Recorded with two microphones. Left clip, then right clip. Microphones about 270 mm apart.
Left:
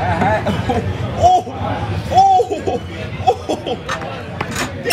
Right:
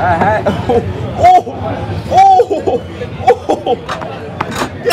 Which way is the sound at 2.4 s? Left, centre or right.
Centre.